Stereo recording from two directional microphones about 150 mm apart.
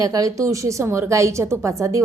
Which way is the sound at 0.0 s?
25° right (ahead or behind).